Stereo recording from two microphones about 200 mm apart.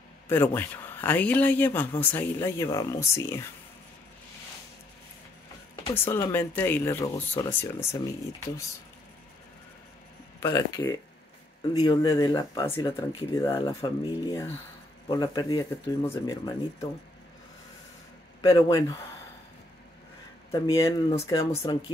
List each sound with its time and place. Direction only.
0.3 s speech: 10° left (ahead or behind)
5.9 s speech: 10° left (ahead or behind)
10.4 s speech: 20° left (ahead or behind)
18.4 s speech: 20° left (ahead or behind)
20.6 s speech: 15° left (ahead or behind)